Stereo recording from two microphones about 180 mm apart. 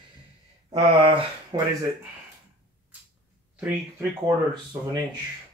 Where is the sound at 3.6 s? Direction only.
10° right (ahead or behind).